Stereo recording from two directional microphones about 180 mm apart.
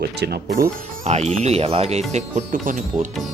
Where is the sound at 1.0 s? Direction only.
35° right (ahead or behind).